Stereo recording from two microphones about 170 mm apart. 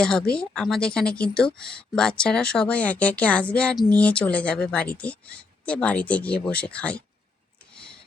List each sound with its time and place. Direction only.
0.0 s speech: 5° left (ahead or behind)